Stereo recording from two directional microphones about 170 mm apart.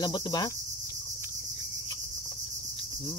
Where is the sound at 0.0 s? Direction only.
25° left (ahead or behind).